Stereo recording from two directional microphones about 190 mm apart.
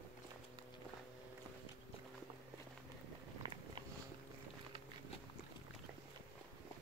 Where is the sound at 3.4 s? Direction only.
25° right (ahead or behind).